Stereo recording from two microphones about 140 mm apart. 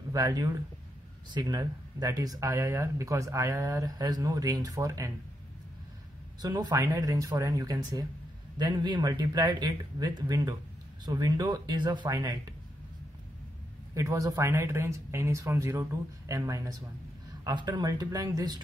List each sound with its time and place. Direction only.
0.1 s speech: 25° right (ahead or behind)
6.4 s speech: 30° right (ahead or behind)
13.9 s speech: 25° right (ahead or behind)